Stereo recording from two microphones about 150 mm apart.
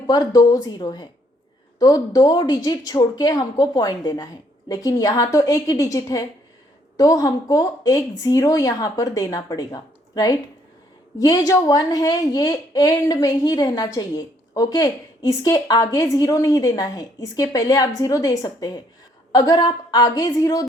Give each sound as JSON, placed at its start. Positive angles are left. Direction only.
{"t": 0.1, "sound": "a woman's voice", "side_deg": 25}